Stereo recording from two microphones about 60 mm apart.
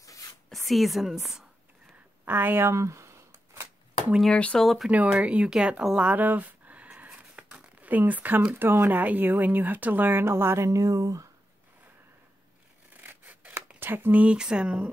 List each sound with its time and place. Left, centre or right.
0.0 s a sound: left
0.5 s a woman's voice: centre
2.2 s speech: right
2.8 s a sound: right
4.3 s speech: left
4.6 s speech: centre
4.9 s speech: right
7.1 s a sound: right
8.5 s speech: right
10.2 s speech: right
10.7 s speech: right
13.0 s scissors: right
13.7 s speech: right
14.2 s speech: centre